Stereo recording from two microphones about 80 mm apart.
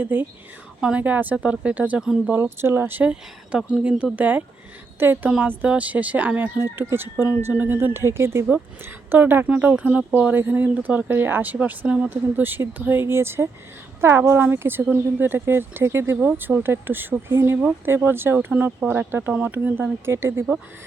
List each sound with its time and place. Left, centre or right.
0.0 s speech: right
0.8 s speech: centre
2.3 s speech: right
3.0 s speech: centre